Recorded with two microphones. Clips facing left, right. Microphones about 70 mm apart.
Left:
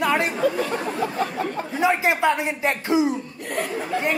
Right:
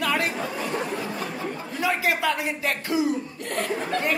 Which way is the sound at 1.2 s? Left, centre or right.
Left.